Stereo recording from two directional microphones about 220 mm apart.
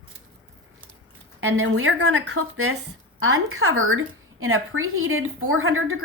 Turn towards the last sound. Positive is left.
turn(degrees=-65)  # may be behind; listen again after turning